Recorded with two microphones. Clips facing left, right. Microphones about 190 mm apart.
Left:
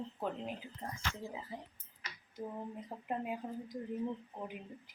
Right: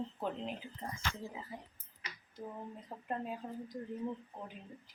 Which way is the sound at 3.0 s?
10° left (ahead or behind).